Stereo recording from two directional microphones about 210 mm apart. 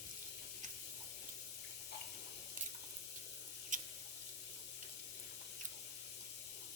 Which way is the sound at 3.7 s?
35° right (ahead or behind).